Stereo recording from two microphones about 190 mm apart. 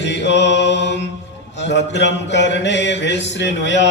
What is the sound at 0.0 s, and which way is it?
Mantra, 65° left (ahead or behind).